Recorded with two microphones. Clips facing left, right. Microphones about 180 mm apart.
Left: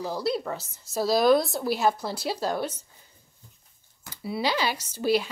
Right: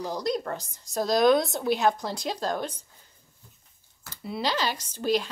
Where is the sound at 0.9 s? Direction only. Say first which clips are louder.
Even; 5° left (ahead or behind).